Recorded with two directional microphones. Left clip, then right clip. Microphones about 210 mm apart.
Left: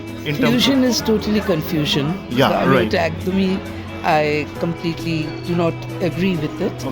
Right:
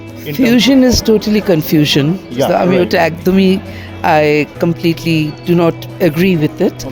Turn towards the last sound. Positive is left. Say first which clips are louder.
# right 8 dB
turn(degrees=-50)  # may be behind; listen again after turning